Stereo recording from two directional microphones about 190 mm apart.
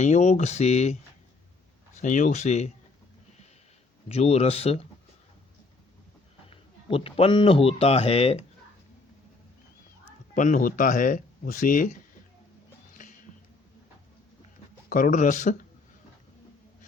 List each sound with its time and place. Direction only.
0.0 s speech: 40° left (ahead or behind)
2.0 s speech: 40° left (ahead or behind)
4.1 s speech: 35° left (ahead or behind)
6.8 s speech: 30° left (ahead or behind)
10.3 s speech: 40° left (ahead or behind)
14.8 s speech: 45° left (ahead or behind)